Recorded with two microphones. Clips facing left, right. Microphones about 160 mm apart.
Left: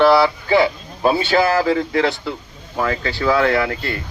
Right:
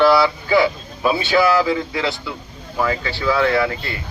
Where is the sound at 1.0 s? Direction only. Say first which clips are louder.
Left 1 dB; 50° left (ahead or behind).